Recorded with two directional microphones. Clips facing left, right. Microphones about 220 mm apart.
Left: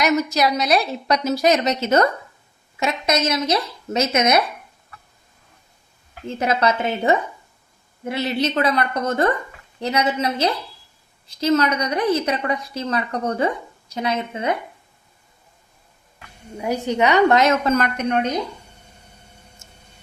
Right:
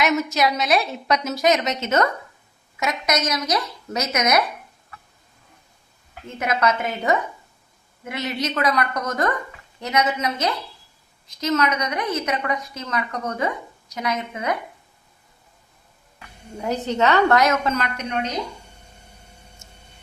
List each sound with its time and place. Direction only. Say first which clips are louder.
0.0 s a woman's voice: left 2 dB; centre (ahead or behind)
1.1 s a woman's voice: left 2 dB; 30° left (ahead or behind)
6.2 s a woman's voice: left 2 dB; 30° left (ahead or behind)
16.6 s a woman's voice: left 2 dB; 10° left (ahead or behind)
17.7 s a woman's voice: left 5 dB; 50° left (ahead or behind)